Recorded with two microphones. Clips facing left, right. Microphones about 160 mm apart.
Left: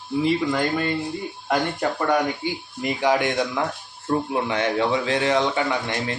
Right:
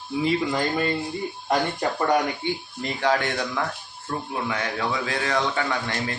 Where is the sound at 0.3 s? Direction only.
Centre (ahead or behind).